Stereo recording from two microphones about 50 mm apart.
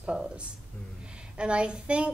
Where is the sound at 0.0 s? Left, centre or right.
Centre.